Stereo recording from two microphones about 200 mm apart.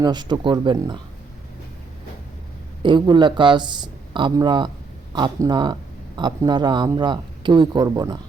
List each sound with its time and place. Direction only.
0.0 s speech: 20° right (ahead or behind)
2.8 s speech: 25° right (ahead or behind)